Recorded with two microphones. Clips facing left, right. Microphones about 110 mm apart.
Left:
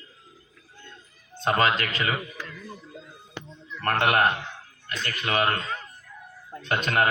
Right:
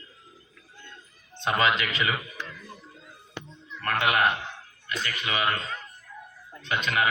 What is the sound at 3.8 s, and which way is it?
Speech, 45° left (ahead or behind).